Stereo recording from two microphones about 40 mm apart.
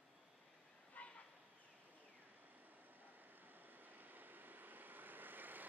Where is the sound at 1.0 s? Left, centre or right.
Left.